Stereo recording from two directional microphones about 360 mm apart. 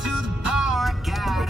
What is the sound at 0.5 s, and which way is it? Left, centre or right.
Music, centre.